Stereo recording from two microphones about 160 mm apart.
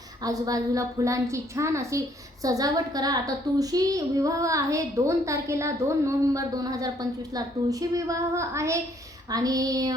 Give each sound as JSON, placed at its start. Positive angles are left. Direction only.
{"t": 0.2, "sound": "a woman's voice", "side_deg": -20}